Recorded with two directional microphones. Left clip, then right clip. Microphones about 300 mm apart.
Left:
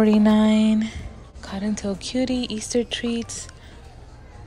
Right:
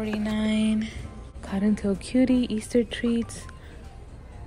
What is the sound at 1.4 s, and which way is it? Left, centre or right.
Speech, centre.